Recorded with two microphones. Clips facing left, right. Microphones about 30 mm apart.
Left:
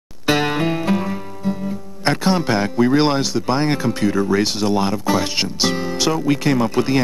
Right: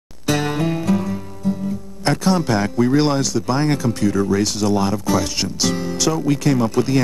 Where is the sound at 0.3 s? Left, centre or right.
Left.